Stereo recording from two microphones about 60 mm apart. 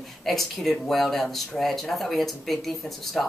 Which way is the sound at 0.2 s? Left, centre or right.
Centre.